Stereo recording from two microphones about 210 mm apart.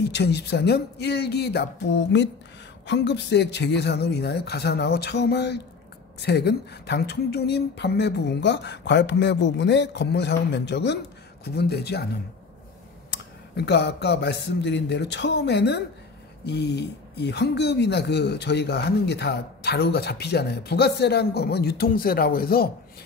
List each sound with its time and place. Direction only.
0.0 s speech: 55° left (ahead or behind)
13.1 s speech: 55° left (ahead or behind)